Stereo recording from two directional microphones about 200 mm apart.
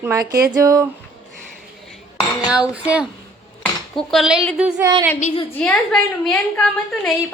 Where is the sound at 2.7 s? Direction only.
5° right (ahead or behind).